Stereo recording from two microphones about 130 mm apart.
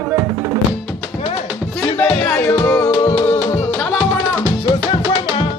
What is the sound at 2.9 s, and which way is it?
Music, 30° left (ahead or behind).